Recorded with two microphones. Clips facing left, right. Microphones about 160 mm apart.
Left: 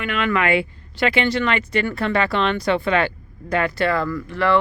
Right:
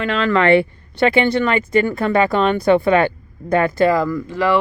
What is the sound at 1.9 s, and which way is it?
Speech, 40° right (ahead or behind).